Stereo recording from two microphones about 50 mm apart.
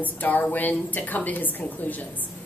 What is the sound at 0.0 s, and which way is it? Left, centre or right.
A woman's voice, left.